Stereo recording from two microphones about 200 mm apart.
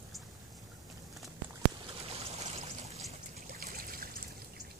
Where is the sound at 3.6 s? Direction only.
45° right (ahead or behind).